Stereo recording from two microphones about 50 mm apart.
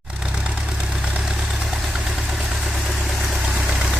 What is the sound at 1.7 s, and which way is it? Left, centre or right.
Vehicle, centre.